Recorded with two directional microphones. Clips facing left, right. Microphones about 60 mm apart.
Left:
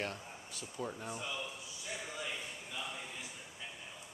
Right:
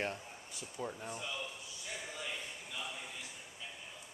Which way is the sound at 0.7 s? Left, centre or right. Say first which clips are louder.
Left 1 dB; centre.